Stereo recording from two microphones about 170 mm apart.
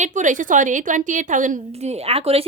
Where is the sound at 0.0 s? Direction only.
45° right (ahead or behind).